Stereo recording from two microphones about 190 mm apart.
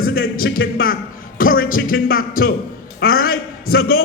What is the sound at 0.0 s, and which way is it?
A man's voice, 50° left (ahead or behind).